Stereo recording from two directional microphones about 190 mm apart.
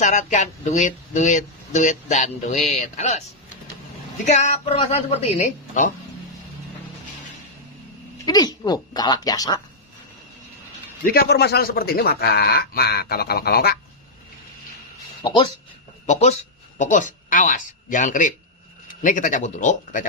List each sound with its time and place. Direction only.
0.0 s speech: 40° left (ahead or behind)
4.3 s speech: 35° left (ahead or behind)
8.3 s speech: 20° left (ahead or behind)
11.1 s speech: 55° left (ahead or behind)
15.2 s speech: 25° left (ahead or behind)
16.1 s speech: 35° left (ahead or behind)